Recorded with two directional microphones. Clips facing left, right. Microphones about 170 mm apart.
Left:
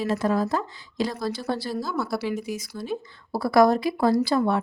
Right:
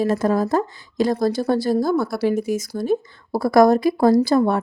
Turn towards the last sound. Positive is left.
turn(degrees=-45)  # may be behind; listen again after turning